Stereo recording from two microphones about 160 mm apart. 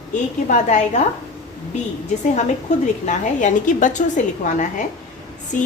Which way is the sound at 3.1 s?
50° left (ahead or behind).